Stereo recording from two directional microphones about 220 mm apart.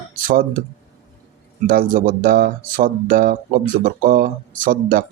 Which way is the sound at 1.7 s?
40° right (ahead or behind).